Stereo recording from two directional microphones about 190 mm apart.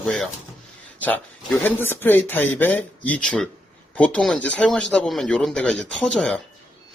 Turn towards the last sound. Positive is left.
turn(degrees=5)  # may be behind; listen again after turning